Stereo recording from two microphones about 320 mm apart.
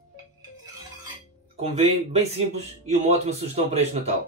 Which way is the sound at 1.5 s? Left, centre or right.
Centre.